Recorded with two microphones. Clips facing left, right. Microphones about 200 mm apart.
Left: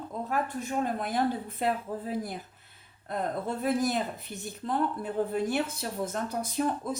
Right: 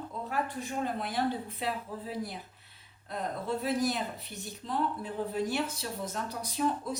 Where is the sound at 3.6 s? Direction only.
50° left (ahead or behind).